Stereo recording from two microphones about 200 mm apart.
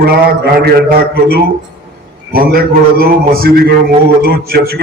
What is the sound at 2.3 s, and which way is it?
Mantra, 45° right (ahead or behind).